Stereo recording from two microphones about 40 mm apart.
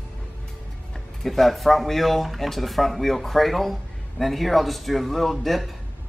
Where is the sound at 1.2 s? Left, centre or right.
Centre.